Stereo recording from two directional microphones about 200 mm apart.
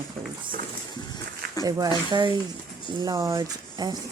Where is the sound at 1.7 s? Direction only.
20° right (ahead or behind).